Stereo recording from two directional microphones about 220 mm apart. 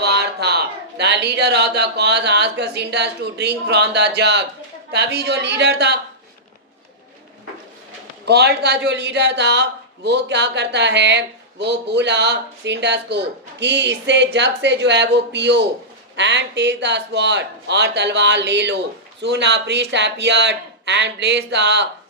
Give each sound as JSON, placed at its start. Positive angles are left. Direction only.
{"t": 0.0, "sound": "a man's voice", "side_deg": -50}
{"t": 8.2, "sound": "a man's voice", "side_deg": -50}